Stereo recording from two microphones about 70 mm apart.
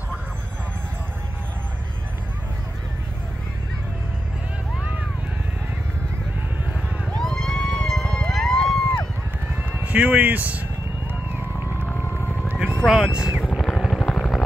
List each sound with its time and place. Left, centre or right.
7.2 s music: centre
9.8 s speech: right
11.8 s whale vocalization: left
12.8 s speech: centre
13.6 s vehicle: centre